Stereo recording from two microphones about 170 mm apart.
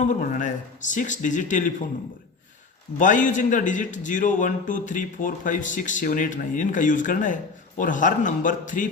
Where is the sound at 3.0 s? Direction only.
50° left (ahead or behind).